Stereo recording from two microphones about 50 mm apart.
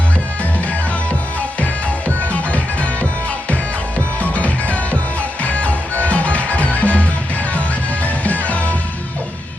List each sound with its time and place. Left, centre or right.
1.6 s music: left
4.2 s music: left